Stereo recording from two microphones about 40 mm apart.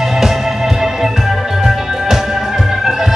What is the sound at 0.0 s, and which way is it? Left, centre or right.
Music, centre.